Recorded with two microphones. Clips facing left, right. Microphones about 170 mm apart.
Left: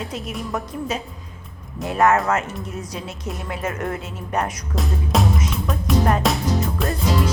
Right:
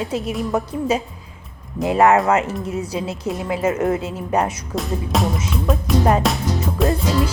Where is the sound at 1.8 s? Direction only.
25° right (ahead or behind).